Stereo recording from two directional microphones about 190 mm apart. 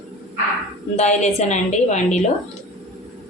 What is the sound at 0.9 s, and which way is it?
A woman's voice, 35° left (ahead or behind).